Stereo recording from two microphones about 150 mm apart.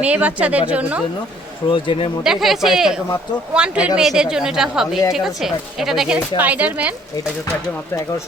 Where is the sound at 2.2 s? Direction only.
Centre (ahead or behind).